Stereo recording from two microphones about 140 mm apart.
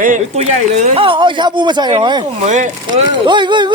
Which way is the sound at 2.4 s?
60° right (ahead or behind).